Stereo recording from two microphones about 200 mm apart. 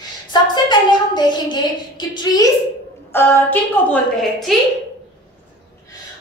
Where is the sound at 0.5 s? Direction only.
20° left (ahead or behind).